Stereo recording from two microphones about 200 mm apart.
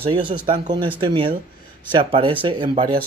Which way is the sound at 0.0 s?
25° right (ahead or behind).